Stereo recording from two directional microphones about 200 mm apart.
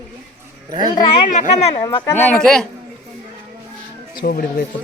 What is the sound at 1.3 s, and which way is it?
Speech, 35° left (ahead or behind).